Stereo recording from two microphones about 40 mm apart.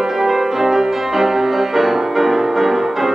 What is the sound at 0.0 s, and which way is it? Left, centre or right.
Music, centre.